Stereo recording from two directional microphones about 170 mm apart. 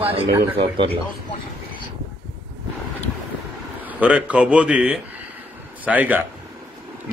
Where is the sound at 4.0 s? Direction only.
10° right (ahead or behind).